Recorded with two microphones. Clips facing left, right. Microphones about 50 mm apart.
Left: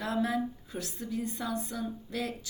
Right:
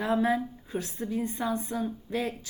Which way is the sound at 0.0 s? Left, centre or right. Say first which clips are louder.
Right 4 dB; right.